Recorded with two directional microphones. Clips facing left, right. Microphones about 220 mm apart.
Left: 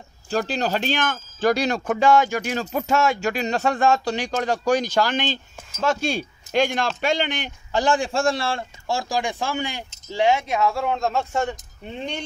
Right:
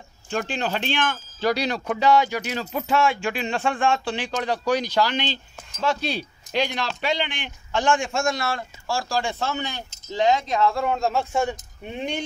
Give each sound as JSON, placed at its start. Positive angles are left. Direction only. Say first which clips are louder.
{"t": 0.3, "sound": "a man's voice", "louder": "left 3 dB", "side_deg": 40}
{"t": 11.0, "sound": "speech", "louder": "even", "side_deg": -10}